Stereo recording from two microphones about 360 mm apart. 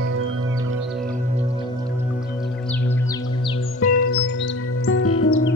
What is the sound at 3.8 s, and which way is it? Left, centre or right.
Music, left.